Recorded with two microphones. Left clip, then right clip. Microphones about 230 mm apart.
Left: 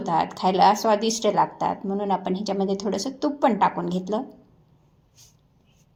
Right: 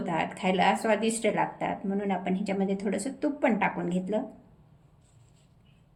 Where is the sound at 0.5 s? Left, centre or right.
Left.